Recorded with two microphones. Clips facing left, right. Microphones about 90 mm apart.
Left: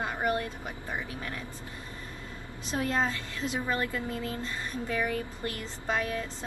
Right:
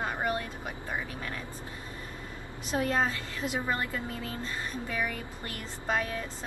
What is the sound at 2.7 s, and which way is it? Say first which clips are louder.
A woman's voice: right 1 dB; 15° right (ahead or behind).